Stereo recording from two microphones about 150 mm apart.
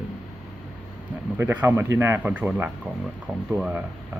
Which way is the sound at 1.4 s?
15° right (ahead or behind).